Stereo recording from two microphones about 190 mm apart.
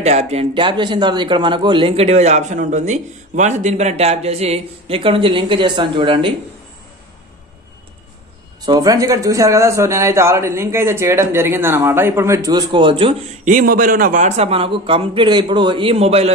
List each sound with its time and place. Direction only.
0.0 s a man's voice: 35° right (ahead or behind)
8.6 s speech: 20° right (ahead or behind)
13.5 s a man's voice: 45° right (ahead or behind)